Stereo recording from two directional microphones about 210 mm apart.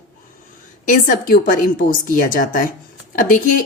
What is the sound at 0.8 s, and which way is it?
A woman's voice, 40° left (ahead or behind).